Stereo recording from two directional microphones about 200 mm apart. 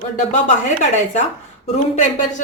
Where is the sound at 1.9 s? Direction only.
35° left (ahead or behind).